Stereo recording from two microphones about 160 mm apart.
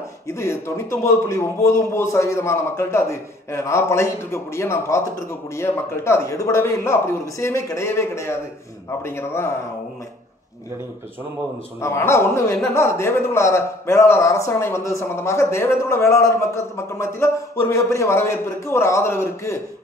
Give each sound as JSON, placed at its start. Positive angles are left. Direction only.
{"t": 0.3, "sound": "a man's voice", "side_deg": 15}
{"t": 11.8, "sound": "a man's voice", "side_deg": 15}